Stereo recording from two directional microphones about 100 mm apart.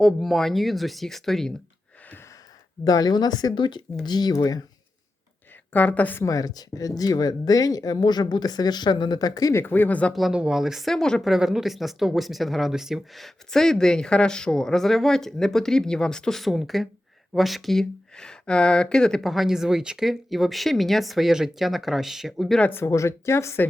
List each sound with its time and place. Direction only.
0.0 s speech: centre (ahead or behind)
2.8 s speech: 40° left (ahead or behind)
5.7 s a woman's voice: 15° left (ahead or behind)
6.2 s speech: 35° left (ahead or behind); by 10.2 s 15° left (ahead or behind)
10.2 s speech: 5° right (ahead or behind)
22.6 s speech: 25° left (ahead or behind)